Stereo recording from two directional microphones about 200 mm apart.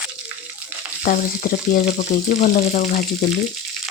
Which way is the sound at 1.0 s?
40° left (ahead or behind).